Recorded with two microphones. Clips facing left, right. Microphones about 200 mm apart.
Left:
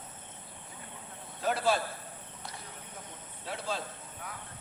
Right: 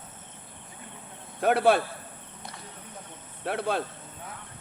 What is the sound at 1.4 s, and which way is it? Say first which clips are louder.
Speech: right 8 dB; 60° right (ahead or behind).